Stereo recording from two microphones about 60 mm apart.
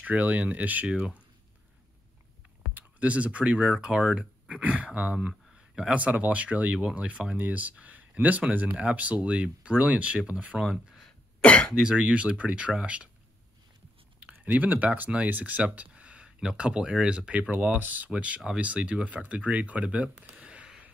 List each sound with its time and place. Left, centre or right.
0.0 s speech: right
2.7 s speech: right
10.6 s speech: centre
11.4 s speech: left
11.8 s speech: centre
14.2 s speech: right
20.3 s a sound: centre